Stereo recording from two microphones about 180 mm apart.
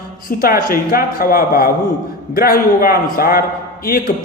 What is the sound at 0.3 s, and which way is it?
A man's voice, 55° left (ahead or behind).